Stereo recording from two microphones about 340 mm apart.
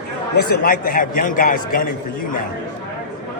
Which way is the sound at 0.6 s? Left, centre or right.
Left.